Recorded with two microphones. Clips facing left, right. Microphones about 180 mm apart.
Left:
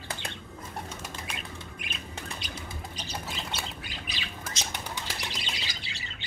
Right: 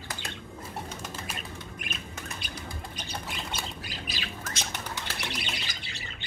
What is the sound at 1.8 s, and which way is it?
Bird, 45° right (ahead or behind).